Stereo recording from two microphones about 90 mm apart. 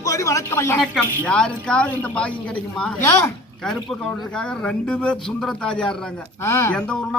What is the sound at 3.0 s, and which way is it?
Speech, 30° left (ahead or behind).